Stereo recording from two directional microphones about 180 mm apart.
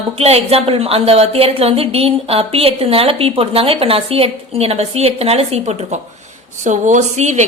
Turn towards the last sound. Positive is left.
turn(degrees=-40)  # may be behind; listen again after turning